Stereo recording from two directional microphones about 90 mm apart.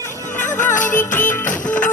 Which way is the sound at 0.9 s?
20° left (ahead or behind).